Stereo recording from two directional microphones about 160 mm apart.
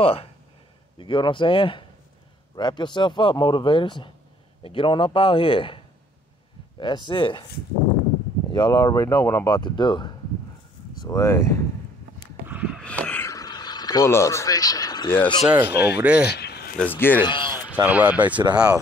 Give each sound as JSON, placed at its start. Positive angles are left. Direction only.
{"t": 0.0, "sound": "a man's voice", "side_deg": 35}
{"t": 6.8, "sound": "speech", "side_deg": 30}
{"t": 8.5, "sound": "speech", "side_deg": 30}
{"t": 9.5, "sound": "speech", "side_deg": 30}
{"t": 11.0, "sound": "speech", "side_deg": 20}
{"t": 12.4, "sound": "a sound", "side_deg": -10}
{"t": 12.8, "sound": "a sound", "side_deg": 10}
{"t": 15.0, "sound": "speech", "side_deg": 10}
{"t": 15.4, "sound": "speech", "side_deg": -15}
{"t": 16.3, "sound": "a sound", "side_deg": 90}
{"t": 16.7, "sound": "speech", "side_deg": 10}
{"t": 17.3, "sound": "a sound", "side_deg": 30}
{"t": 17.6, "sound": "speech", "side_deg": -10}